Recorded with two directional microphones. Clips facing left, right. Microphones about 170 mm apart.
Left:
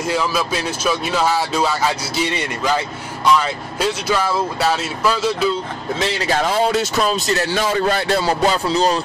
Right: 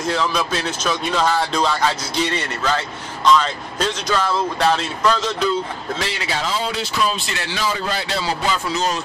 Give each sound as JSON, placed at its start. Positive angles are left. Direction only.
{"t": 0.0, "sound": "speech", "side_deg": 10}
{"t": 6.2, "sound": "speech", "side_deg": 55}
{"t": 8.6, "sound": "speech", "side_deg": 35}